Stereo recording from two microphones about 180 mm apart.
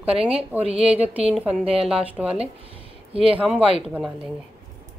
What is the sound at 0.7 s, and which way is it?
Speech, 30° right (ahead or behind).